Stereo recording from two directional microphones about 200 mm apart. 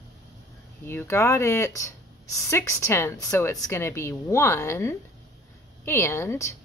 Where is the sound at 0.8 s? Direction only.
10° left (ahead or behind).